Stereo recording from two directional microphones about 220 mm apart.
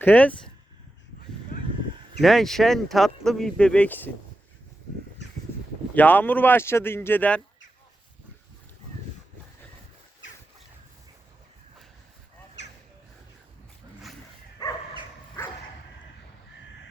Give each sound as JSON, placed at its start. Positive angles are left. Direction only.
{"t": 0.0, "sound": "speech", "side_deg": 5}
{"t": 2.2, "sound": "speech", "side_deg": 0}
{"t": 5.9, "sound": "speech", "side_deg": 10}
{"t": 14.6, "sound": "dog", "side_deg": 20}